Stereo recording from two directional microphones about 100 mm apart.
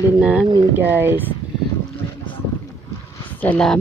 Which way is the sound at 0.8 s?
20° right (ahead or behind).